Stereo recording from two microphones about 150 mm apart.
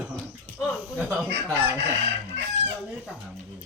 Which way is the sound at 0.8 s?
10° right (ahead or behind).